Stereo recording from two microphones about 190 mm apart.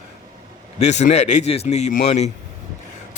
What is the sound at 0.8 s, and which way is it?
A man's voice, 35° left (ahead or behind).